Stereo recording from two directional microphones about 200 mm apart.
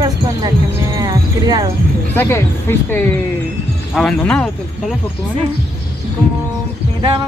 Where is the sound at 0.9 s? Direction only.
20° right (ahead or behind).